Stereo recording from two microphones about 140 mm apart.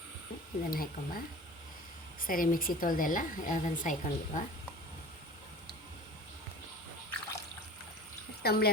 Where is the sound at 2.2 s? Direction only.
85° left; by 3.9 s 70° left (ahead or behind).